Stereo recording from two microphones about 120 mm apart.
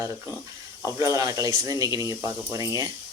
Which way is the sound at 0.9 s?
30° right (ahead or behind).